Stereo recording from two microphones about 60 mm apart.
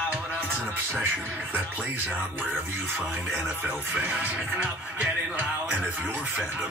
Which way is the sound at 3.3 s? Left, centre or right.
Right.